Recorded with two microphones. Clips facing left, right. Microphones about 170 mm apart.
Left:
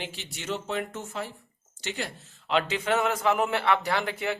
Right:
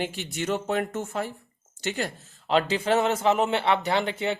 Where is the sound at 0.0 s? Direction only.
50° right (ahead or behind).